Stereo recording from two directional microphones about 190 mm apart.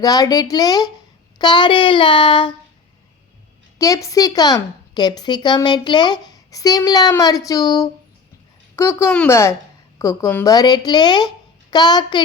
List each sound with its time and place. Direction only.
0.0 s a woman's voice: 20° left (ahead or behind)
3.8 s a woman's voice: 15° left (ahead or behind)